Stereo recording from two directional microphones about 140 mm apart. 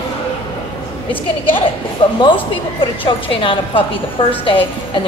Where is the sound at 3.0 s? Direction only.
40° left (ahead or behind).